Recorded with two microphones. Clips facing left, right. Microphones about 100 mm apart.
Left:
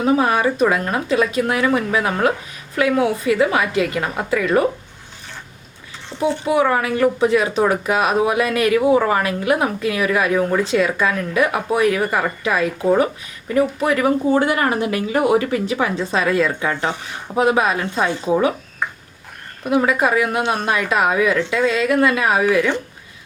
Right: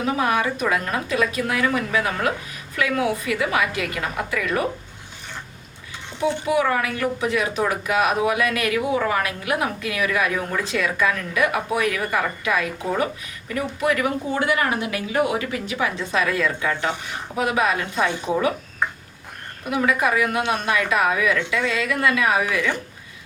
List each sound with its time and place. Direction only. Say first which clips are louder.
0.0 s speech: left 5 dB; 35° left (ahead or behind)
6.1 s speech: left 3 dB; 35° left (ahead or behind)
13.8 s speech: left 5 dB; 35° left (ahead or behind)
19.7 s speech: left 4 dB; 30° left (ahead or behind)